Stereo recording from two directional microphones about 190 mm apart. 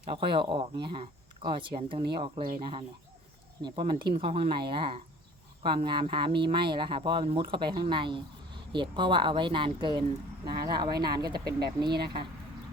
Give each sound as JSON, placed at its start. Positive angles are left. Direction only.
{"t": 0.0, "sound": "speech", "side_deg": -25}
{"t": 3.6, "sound": "speech", "side_deg": -25}
{"t": 11.9, "sound": "speech", "side_deg": -55}